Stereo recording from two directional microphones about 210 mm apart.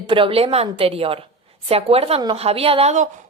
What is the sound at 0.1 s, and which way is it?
A woman's voice, 25° right (ahead or behind).